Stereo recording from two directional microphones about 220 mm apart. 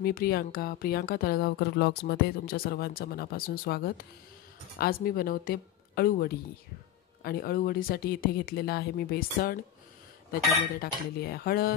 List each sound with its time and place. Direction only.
0.0 s speech: 45° left (ahead or behind)
10.8 s speech: 45° left (ahead or behind)